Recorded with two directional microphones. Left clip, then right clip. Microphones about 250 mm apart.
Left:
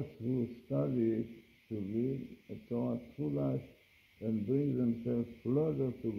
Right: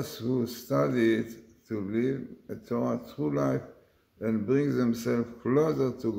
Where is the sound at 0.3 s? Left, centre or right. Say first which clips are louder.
Right 8 dB; right.